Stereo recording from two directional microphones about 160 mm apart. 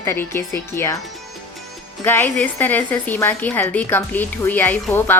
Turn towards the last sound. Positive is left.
turn(degrees=10)  # may be behind; listen again after turning